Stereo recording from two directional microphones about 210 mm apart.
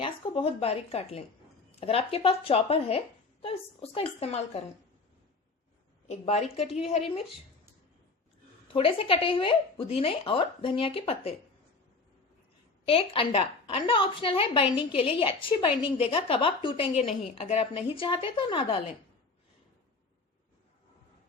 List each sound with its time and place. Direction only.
0.0 s a woman's voice: 25° left (ahead or behind)
6.1 s a woman's voice: 30° left (ahead or behind)
8.6 s a woman's voice: 25° left (ahead or behind)
12.8 s a woman's voice: 25° left (ahead or behind)